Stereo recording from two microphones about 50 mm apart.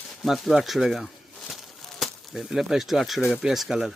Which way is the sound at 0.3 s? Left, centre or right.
Centre.